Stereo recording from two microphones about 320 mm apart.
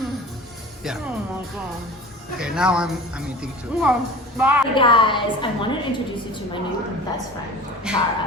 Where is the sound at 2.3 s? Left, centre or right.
Centre.